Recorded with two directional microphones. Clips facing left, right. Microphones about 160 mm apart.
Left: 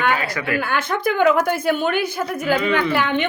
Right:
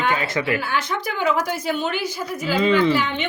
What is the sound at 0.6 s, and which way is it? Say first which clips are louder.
A woman's voice: left 4 dB; 55° left (ahead or behind).